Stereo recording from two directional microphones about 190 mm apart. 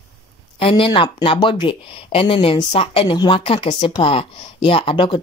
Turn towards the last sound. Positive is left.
turn(degrees=25)  # may be behind; listen again after turning